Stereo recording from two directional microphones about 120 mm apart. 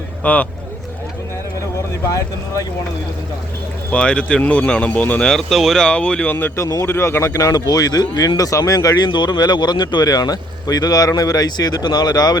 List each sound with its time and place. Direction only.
0.2 s speech: 10° left (ahead or behind)
3.9 s speech: 10° left (ahead or behind)
6.3 s speech: 20° left (ahead or behind)